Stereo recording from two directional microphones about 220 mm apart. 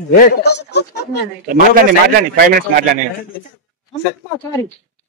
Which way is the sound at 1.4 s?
40° right (ahead or behind).